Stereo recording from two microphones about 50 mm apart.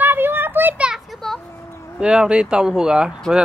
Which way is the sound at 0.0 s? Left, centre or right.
Right.